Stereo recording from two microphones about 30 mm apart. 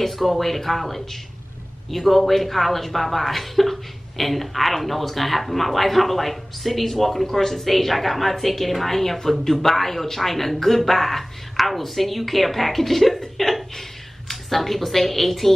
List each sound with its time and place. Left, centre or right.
0.0 s speech: centre